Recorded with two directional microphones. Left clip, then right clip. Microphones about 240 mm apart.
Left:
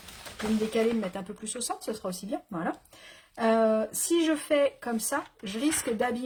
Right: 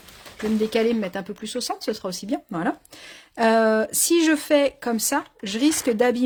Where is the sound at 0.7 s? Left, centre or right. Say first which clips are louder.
Right 4 dB; right.